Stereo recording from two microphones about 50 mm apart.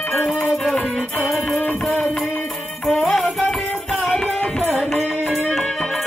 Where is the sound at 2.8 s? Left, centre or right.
Centre.